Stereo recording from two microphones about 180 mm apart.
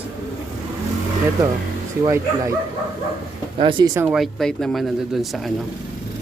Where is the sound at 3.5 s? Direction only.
30° right (ahead or behind).